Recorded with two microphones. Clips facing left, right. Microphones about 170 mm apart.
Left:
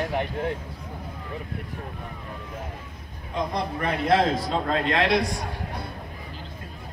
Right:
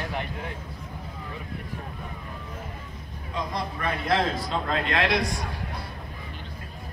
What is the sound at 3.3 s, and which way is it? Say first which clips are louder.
Speech: left 4 dB; 55° left (ahead or behind).